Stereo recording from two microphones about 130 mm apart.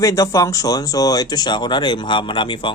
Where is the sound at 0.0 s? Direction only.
25° left (ahead or behind).